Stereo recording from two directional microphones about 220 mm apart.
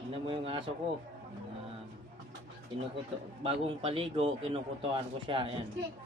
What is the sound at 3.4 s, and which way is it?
A man's voice, 25° right (ahead or behind).